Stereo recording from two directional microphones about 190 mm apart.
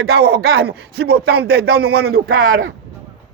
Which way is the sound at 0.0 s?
60° right (ahead or behind).